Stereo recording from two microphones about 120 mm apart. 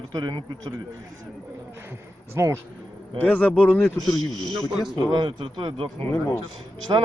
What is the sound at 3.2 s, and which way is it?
Speech, 15° left (ahead or behind).